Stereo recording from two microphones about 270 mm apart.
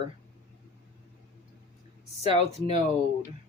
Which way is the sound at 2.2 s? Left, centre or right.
Left.